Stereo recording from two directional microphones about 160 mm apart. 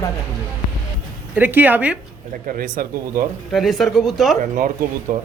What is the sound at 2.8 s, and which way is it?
Speech, 65° right (ahead or behind).